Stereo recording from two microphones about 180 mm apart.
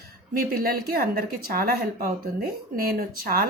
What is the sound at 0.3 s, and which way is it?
A woman's voice, 55° right (ahead or behind).